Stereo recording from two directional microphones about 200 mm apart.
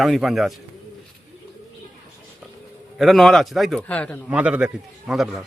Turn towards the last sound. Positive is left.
turn(degrees=0)  # may be behind; listen again after turning